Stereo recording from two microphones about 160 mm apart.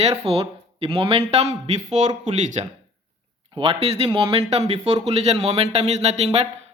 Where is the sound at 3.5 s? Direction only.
35° right (ahead or behind).